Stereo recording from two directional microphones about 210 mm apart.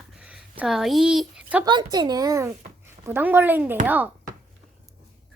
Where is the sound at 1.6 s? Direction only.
20° right (ahead or behind).